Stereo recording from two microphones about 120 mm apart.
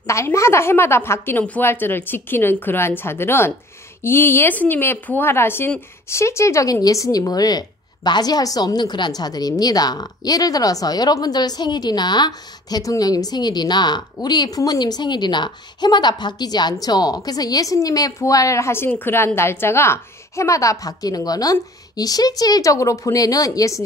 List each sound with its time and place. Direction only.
0.0 s a woman's voice: 25° left (ahead or behind)